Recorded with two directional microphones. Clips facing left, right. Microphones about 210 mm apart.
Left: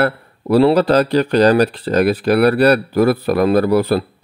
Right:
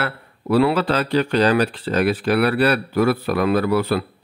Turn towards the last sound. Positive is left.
turn(degrees=40)  # may be behind; listen again after turning